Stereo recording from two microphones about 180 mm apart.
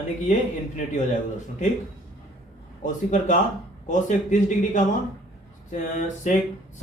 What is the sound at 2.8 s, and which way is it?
A man's voice, 45° left (ahead or behind).